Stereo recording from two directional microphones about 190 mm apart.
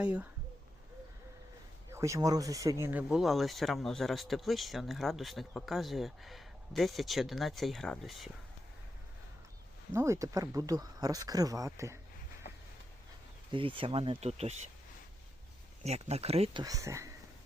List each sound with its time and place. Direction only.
0.0 s speech: 5° right (ahead or behind)
1.9 s speech: 15° right (ahead or behind)
2.8 s speech: 5° right (ahead or behind)
9.9 s speech: 15° right (ahead or behind)
13.5 s speech: 25° right (ahead or behind)
15.8 s speech: 35° right (ahead or behind)
16.6 s speech: 15° right (ahead or behind)